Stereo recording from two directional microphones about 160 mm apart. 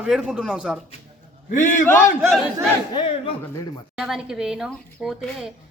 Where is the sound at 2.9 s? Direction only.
30° left (ahead or behind).